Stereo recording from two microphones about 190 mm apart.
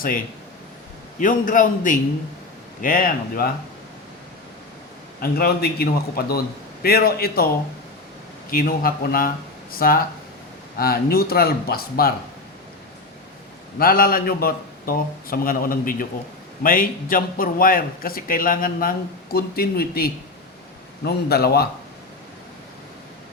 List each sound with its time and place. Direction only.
1.2 s a man's voice: 45° left (ahead or behind)
5.2 s a man's voice: 55° left (ahead or behind)
8.4 s a man's voice: 50° left (ahead or behind)
13.7 s a man's voice: 50° left (ahead or behind)